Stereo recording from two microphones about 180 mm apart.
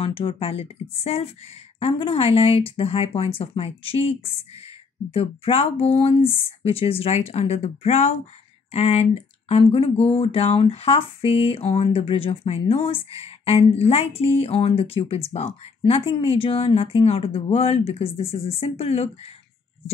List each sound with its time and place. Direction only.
0.0 s speech: 30° left (ahead or behind)